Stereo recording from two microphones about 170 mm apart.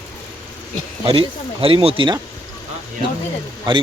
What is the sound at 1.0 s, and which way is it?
Speech, 35° right (ahead or behind).